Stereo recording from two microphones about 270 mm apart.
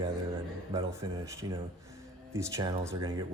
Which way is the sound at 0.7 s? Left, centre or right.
Centre.